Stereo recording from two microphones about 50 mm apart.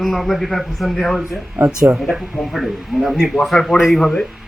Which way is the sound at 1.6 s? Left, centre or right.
Right.